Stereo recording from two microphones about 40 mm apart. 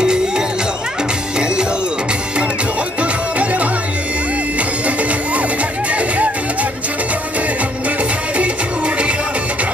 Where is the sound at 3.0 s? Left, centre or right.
Right.